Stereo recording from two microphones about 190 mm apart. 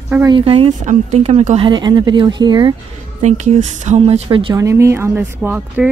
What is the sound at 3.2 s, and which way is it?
Speech, 40° right (ahead or behind).